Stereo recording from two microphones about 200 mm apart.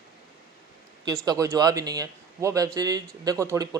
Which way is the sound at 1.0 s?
20° right (ahead or behind).